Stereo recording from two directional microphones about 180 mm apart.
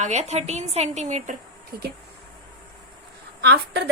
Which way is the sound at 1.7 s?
55° right (ahead or behind).